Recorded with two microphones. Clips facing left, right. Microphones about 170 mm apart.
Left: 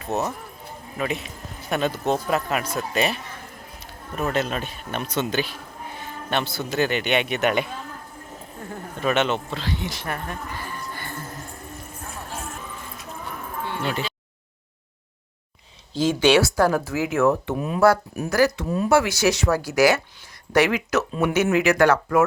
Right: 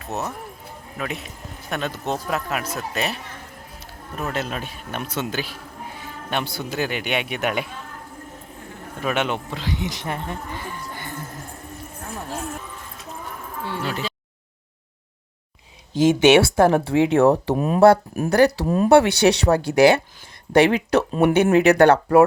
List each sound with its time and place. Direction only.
0.0 s a man's voice: centre (ahead or behind)
9.0 s speech: 10° right (ahead or behind)
13.7 s music: 35° right (ahead or behind)
15.9 s speech: 20° right (ahead or behind); by 17.7 s 40° right (ahead or behind)
17.7 s speech: 25° right (ahead or behind)